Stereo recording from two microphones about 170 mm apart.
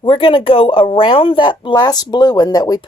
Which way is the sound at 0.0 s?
30° left (ahead or behind).